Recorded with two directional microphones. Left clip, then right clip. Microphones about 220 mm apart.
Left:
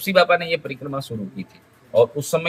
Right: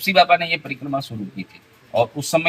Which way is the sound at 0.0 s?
10° left (ahead or behind).